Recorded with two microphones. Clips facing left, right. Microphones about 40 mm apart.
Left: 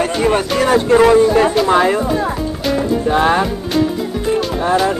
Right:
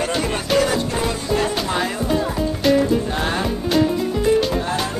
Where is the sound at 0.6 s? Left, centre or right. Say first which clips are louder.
Left 8 dB; left.